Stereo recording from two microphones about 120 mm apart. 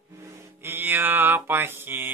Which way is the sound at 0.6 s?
20° right (ahead or behind).